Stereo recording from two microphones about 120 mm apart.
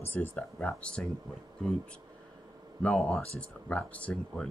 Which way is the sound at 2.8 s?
10° left (ahead or behind).